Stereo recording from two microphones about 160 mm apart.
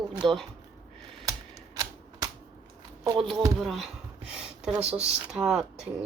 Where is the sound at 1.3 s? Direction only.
20° right (ahead or behind).